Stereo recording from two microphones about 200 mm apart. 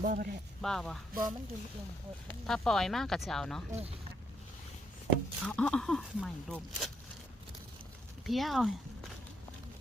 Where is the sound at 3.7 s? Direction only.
30° right (ahead or behind).